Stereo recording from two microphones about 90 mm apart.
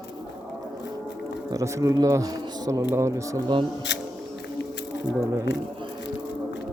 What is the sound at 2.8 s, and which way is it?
Speech, 30° right (ahead or behind).